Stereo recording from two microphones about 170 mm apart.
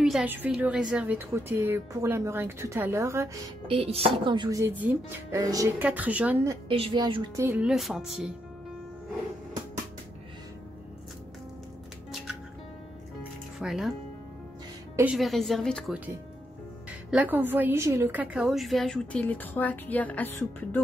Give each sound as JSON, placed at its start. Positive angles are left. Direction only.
{"t": 0.0, "sound": "a woman's voice", "side_deg": -5}
{"t": 3.6, "sound": "speech", "side_deg": -35}
{"t": 5.9, "sound": "a woman's voice", "side_deg": -10}
{"t": 6.7, "sound": "speech", "side_deg": -30}
{"t": 7.3, "sound": "a woman's voice", "side_deg": -15}
{"t": 7.6, "sound": "a woman's voice", "side_deg": -5}
{"t": 13.2, "sound": "music", "side_deg": 0}
{"t": 15.1, "sound": "a woman's voice", "side_deg": 0}
{"t": 17.1, "sound": "a woman's voice", "side_deg": -10}